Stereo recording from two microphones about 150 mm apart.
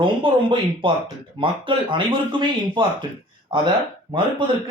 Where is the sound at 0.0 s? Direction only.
35° right (ahead or behind).